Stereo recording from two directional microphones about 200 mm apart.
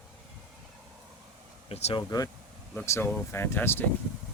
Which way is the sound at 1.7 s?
25° left (ahead or behind).